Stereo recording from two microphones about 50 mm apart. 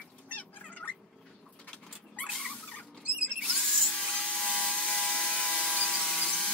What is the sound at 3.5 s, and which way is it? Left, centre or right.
Dental drill, centre.